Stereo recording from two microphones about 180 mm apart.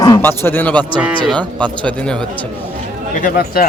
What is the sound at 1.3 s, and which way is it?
Speech, 5° left (ahead or behind).